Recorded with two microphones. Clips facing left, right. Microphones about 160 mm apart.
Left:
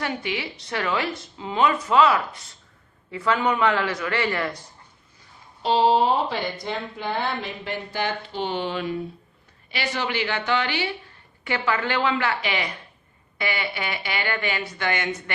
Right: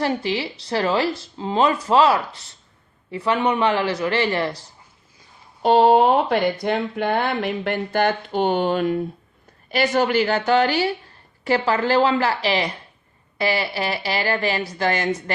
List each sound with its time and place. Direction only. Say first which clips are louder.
0.0 s a man's voice: right 6 dB; 30° right (ahead or behind)
5.6 s a woman's voice: right 5 dB; 55° right (ahead or behind); by 15.2 s 35° right (ahead or behind)